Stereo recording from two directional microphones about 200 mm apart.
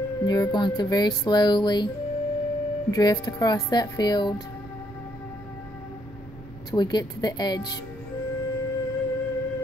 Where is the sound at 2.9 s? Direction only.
20° left (ahead or behind).